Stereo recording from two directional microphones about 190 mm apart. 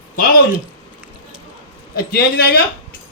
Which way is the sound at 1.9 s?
55° left (ahead or behind).